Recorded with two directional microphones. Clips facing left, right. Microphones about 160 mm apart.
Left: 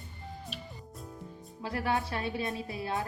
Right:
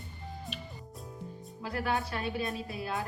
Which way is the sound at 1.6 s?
25° left (ahead or behind).